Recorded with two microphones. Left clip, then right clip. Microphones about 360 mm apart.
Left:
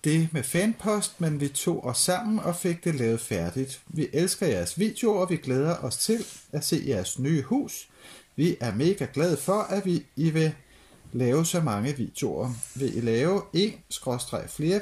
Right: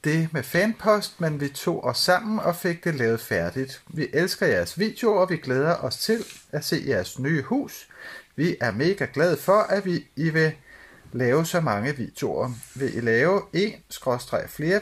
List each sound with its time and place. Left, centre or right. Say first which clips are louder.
0.3 s speech: right 4 dB; centre